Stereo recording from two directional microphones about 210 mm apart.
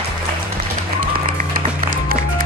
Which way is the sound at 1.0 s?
45° right (ahead or behind).